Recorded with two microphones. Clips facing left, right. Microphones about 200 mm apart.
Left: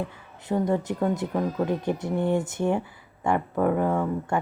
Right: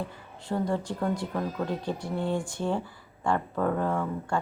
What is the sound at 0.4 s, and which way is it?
Speech, 20° left (ahead or behind).